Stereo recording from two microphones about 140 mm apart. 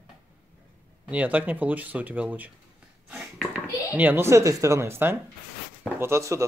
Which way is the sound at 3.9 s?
10° right (ahead or behind).